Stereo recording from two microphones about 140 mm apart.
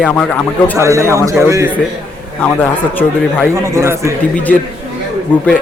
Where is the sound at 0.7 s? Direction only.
20° right (ahead or behind).